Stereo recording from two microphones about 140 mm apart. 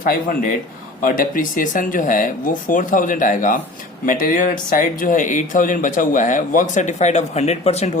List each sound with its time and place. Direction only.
0.0 s speech: 85° left; by 7.9 s 50° left (ahead or behind)